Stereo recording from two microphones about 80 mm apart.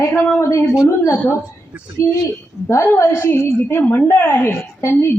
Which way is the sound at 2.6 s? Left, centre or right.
Left.